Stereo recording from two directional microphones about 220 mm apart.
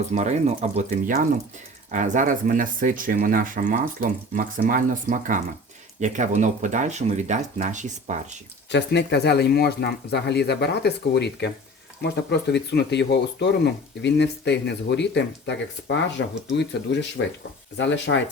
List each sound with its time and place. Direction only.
0.1 s speech: 30° right (ahead or behind)
8.7 s speech: 50° left (ahead or behind)